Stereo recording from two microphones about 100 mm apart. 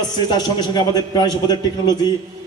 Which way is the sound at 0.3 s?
45° left (ahead or behind).